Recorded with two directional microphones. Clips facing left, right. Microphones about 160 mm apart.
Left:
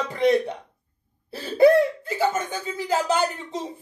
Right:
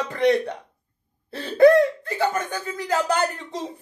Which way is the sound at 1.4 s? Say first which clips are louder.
Right 2 dB; 10° left (ahead or behind).